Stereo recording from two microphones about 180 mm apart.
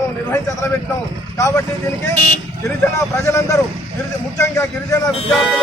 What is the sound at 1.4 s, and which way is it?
Speech, 15° left (ahead or behind).